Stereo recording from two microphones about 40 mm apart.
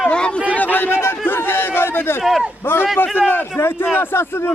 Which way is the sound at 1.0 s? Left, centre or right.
Left.